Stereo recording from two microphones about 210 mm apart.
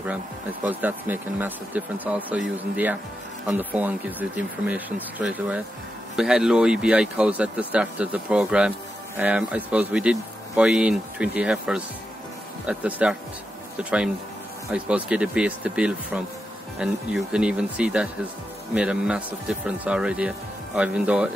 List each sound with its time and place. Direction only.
0.7 s speech: 10° right (ahead or behind)